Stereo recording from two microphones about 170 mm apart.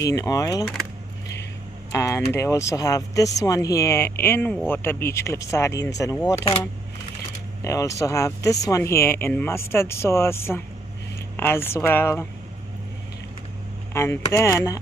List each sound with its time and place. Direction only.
0.0 s speech: 20° left (ahead or behind)
2.0 s speech: 15° left (ahead or behind)
7.6 s speech: 20° left (ahead or behind)
13.9 s speech: 15° left (ahead or behind)